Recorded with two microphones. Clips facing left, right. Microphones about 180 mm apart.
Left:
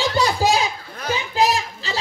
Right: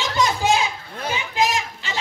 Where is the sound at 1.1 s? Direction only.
35° left (ahead or behind).